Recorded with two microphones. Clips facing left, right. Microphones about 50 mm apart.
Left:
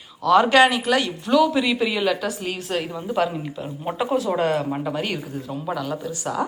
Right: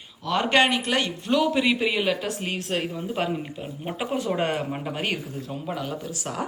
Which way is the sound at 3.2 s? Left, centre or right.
Centre.